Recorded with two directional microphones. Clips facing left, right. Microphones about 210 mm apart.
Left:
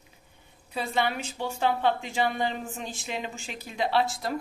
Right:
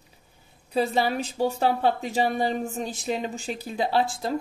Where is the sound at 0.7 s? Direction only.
35° right (ahead or behind).